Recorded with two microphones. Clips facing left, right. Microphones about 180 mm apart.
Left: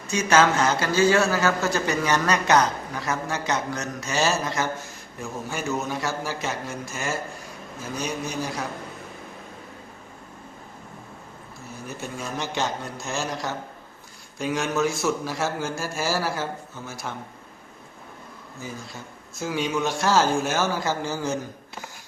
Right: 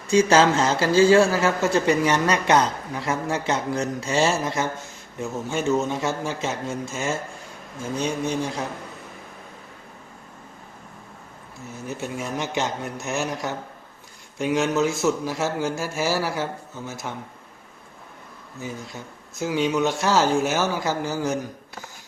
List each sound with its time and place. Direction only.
0.1 s a man's voice: 30° right (ahead or behind)
11.9 s a man's voice: 20° right (ahead or behind)
19.4 s speech: 15° right (ahead or behind)